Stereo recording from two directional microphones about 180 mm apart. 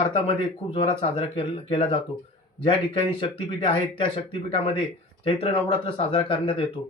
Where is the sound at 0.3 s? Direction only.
30° left (ahead or behind).